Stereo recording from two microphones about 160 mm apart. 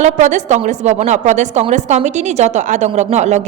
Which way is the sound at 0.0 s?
50° right (ahead or behind).